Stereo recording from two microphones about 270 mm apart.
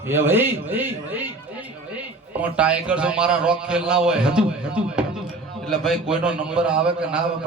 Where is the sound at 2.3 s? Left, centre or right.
Centre.